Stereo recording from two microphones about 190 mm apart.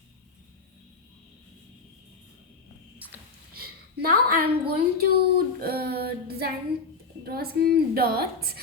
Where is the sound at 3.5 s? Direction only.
55° right (ahead or behind).